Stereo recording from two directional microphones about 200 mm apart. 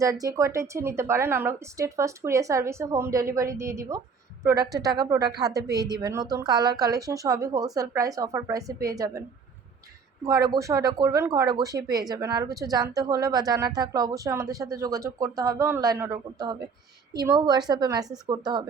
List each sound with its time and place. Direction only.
0.0 s speech: 15° right (ahead or behind)
10.2 s a woman's voice: 15° right (ahead or behind)